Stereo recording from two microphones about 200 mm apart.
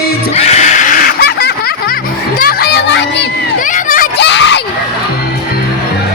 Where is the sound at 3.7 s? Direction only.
40° left (ahead or behind).